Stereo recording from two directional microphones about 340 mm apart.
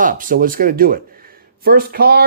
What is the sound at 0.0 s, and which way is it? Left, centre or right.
Speech, right.